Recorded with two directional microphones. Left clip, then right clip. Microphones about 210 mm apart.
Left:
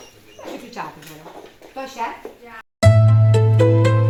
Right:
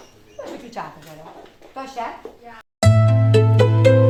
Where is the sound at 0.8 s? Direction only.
25° right (ahead or behind).